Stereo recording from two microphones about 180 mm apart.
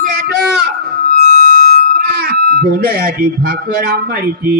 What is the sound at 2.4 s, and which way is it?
Buzzer, 60° right (ahead or behind).